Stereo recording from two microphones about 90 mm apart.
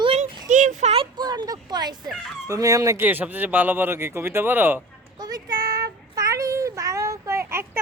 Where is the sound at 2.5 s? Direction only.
35° right (ahead or behind).